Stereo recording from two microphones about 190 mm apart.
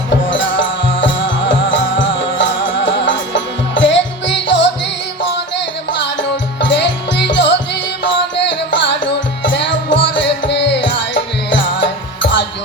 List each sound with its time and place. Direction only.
0.3 s music: 75° left (ahead or behind)
2.0 s music: 25° left (ahead or behind)
2.4 s music: 75° left (ahead or behind)